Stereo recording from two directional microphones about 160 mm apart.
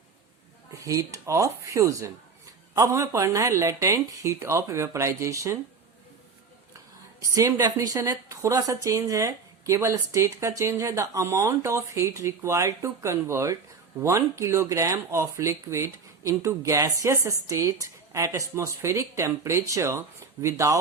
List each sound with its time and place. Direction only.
0.7 s a woman's voice: 20° right (ahead or behind)
7.2 s a woman's voice: 20° right (ahead or behind)